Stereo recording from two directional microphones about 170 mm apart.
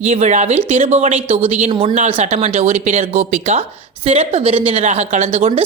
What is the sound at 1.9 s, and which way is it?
Speech, 40° right (ahead or behind).